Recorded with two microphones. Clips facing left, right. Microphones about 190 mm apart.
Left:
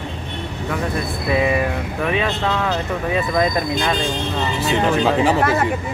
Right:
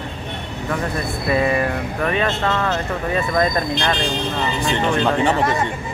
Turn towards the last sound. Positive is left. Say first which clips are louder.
# left 2 dB
turn(degrees=5)  # may be behind; listen again after turning